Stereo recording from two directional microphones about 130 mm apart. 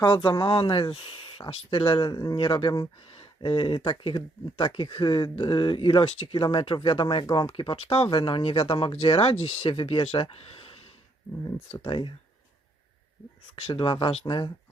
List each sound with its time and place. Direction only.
0.0 s speech: 35° left (ahead or behind)
11.8 s speech: 40° left (ahead or behind)
13.6 s speech: 45° left (ahead or behind)